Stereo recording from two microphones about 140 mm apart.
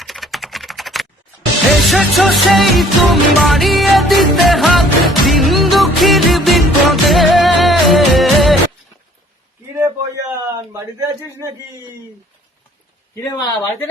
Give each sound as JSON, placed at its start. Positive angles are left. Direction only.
{"t": 0.0, "sound": "typing", "side_deg": 0}
{"t": 1.9, "sound": "music", "side_deg": 0}
{"t": 9.7, "sound": "a sound", "side_deg": -20}
{"t": 13.3, "sound": "speech", "side_deg": 30}